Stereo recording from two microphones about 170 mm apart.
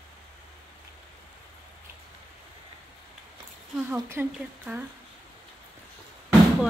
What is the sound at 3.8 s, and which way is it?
Speech, 15° right (ahead or behind).